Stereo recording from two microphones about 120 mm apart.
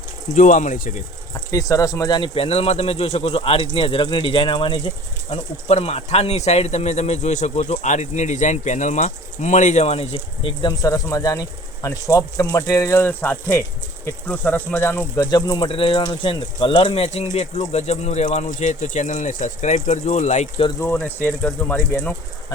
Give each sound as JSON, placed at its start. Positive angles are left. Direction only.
{"t": 0.3, "sound": "speech", "side_deg": 90}
{"t": 1.3, "sound": "speech", "side_deg": 30}
{"t": 2.3, "sound": "speech", "side_deg": 55}
{"t": 5.3, "sound": "speech", "side_deg": 55}
{"t": 10.6, "sound": "speech", "side_deg": 30}
{"t": 18.3, "sound": "speech", "side_deg": 80}
{"t": 20.7, "sound": "speech", "side_deg": 15}